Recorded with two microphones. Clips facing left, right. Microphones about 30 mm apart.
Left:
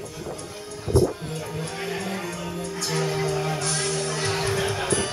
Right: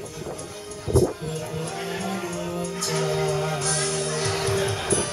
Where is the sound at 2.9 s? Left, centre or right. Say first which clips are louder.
Right 1 dB; centre.